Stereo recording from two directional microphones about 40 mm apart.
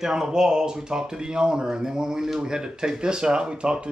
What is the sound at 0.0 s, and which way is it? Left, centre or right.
Speech, centre.